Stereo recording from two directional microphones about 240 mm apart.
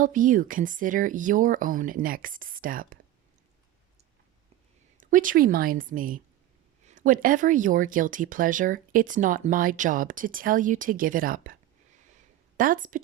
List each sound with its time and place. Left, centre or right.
0.0 s speech: right
4.9 s speech: right
12.1 s a sound: right